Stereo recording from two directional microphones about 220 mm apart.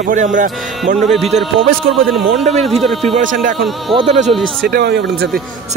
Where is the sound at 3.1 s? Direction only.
35° right (ahead or behind).